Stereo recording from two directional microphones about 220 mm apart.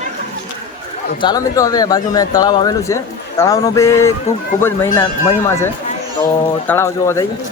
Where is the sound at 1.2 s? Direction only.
15° left (ahead or behind).